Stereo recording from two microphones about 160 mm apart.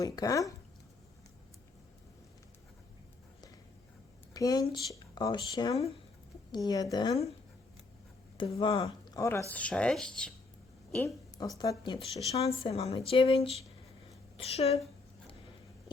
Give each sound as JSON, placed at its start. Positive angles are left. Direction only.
{"t": 0.0, "sound": "a woman's voice", "side_deg": 20}
{"t": 4.4, "sound": "a woman's voice", "side_deg": 25}
{"t": 8.4, "sound": "speech", "side_deg": 30}
{"t": 11.0, "sound": "a woman's voice", "side_deg": 20}
{"t": 12.3, "sound": "a woman's voice", "side_deg": 40}